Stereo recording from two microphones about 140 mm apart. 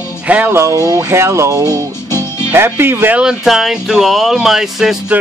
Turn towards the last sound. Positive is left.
turn(degrees=-5)  # may be behind; listen again after turning